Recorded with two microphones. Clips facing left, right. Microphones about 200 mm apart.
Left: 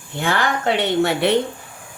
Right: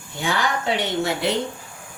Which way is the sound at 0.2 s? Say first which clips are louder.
Left 3 dB; 55° left (ahead or behind).